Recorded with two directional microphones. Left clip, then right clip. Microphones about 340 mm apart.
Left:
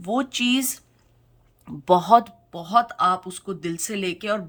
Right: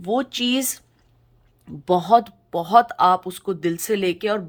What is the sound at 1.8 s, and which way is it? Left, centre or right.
Speech, centre.